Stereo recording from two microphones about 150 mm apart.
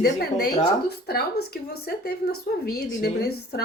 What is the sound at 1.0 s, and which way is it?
A woman's voice, 90° left.